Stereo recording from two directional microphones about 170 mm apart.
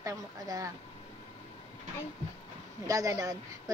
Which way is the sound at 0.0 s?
20° right (ahead or behind).